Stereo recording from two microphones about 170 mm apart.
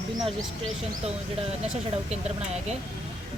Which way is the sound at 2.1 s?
40° right (ahead or behind).